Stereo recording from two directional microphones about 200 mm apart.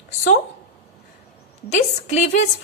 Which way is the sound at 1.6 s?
35° left (ahead or behind).